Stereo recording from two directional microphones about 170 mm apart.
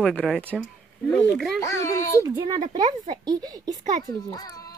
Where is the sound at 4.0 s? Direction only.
25° left (ahead or behind).